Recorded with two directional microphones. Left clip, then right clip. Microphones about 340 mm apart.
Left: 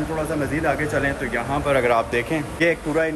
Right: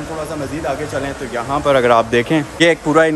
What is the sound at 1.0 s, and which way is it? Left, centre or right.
Speech, centre.